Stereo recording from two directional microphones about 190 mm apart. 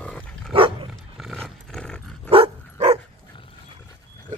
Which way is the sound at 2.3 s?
30° right (ahead or behind).